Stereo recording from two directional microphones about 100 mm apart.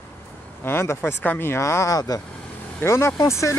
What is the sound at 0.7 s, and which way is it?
Speech, 25° left (ahead or behind).